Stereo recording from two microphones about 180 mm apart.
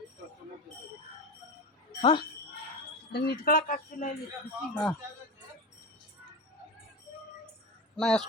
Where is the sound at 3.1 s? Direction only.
60° left (ahead or behind).